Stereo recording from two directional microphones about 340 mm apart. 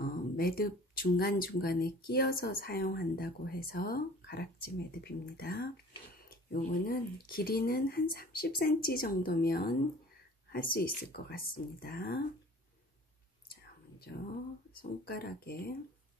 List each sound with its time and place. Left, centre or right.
0.0 s speech: left
13.5 s whispering: left
14.8 s speech: left